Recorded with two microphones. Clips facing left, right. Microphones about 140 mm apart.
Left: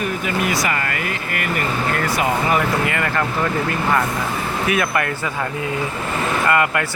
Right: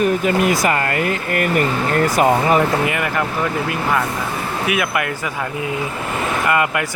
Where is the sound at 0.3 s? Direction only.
50° right (ahead or behind).